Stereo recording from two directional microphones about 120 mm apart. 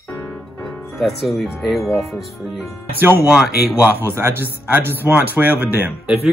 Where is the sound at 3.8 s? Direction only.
20° right (ahead or behind).